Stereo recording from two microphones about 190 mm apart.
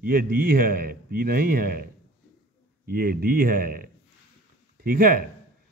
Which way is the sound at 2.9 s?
50° right (ahead or behind).